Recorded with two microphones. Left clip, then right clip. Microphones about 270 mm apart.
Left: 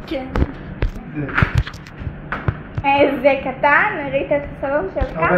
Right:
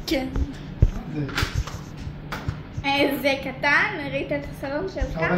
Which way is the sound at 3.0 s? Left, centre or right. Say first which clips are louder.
Left 7 dB; centre.